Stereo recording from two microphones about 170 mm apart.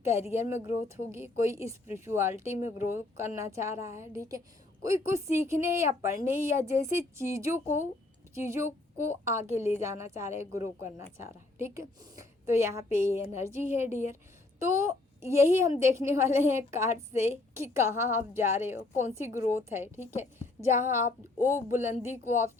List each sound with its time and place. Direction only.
0.0 s a woman's voice: 15° right (ahead or behind)